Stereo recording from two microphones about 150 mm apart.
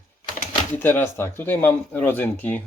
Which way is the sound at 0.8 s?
15° left (ahead or behind).